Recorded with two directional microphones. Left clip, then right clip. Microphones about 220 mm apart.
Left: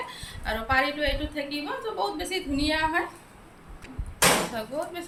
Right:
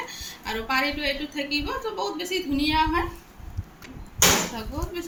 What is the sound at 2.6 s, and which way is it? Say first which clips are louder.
Speech: right 2 dB; 15° left (ahead or behind).